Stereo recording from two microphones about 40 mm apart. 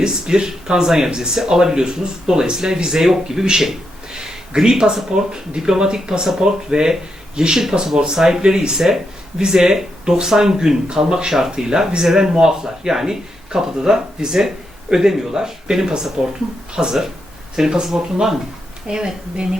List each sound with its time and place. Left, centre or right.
0.0 s speech: centre